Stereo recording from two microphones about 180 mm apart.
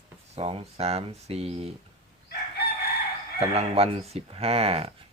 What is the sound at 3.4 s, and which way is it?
Speech, 35° right (ahead or behind).